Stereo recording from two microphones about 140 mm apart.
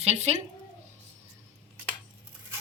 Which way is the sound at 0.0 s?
50° right (ahead or behind).